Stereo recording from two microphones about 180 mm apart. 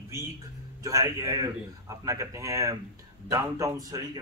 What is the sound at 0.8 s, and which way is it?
A man's voice, 20° right (ahead or behind).